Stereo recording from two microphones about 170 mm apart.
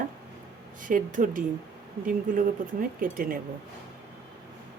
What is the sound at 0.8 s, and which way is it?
Speech, 50° right (ahead or behind).